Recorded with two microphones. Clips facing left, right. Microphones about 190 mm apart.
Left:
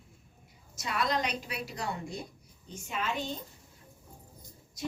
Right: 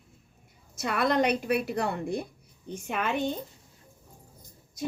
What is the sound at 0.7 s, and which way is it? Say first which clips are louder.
A woman's voice: right 6 dB; 55° right (ahead or behind).